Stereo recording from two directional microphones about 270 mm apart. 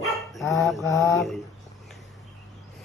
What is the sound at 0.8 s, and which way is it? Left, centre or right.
Mantra, centre.